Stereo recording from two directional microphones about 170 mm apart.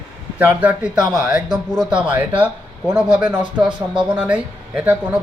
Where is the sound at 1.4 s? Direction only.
5° right (ahead or behind).